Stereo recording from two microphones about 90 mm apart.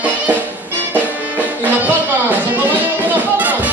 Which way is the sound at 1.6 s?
20° right (ahead or behind).